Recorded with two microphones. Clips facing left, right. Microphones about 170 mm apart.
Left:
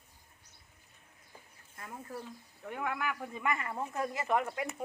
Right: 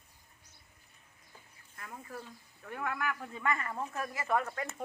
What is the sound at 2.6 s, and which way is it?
Speech, 15° left (ahead or behind).